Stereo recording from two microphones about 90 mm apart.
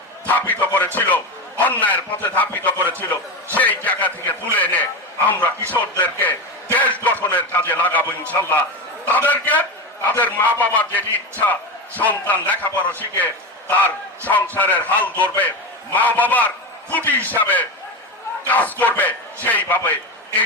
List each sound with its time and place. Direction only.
0.3 s a man's voice: 20° left (ahead or behind)
9.0 s a man's voice: 20° left (ahead or behind)